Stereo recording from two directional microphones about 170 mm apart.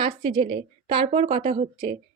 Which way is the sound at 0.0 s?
30° right (ahead or behind).